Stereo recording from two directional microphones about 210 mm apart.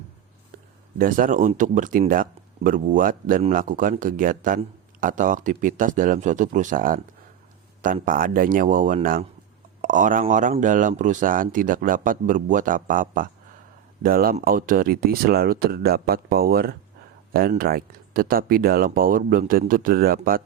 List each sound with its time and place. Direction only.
0.9 s speech: 40° right (ahead or behind)